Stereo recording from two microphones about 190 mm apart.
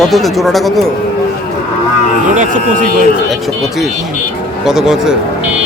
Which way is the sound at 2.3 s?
40° right (ahead or behind).